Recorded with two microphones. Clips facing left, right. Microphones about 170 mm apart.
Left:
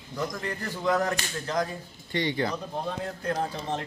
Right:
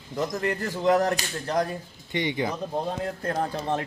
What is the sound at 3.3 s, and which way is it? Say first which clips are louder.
Speech: right 2 dB; 55° right (ahead or behind).